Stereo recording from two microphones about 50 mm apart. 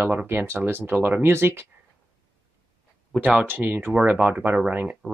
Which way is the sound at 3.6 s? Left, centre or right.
Right.